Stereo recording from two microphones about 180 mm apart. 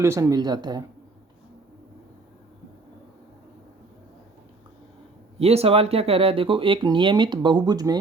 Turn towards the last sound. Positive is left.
turn(degrees=-20)  # may be behind; listen again after turning